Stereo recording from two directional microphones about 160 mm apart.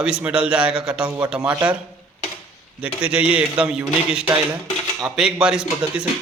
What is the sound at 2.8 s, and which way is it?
A man's voice, 10° right (ahead or behind).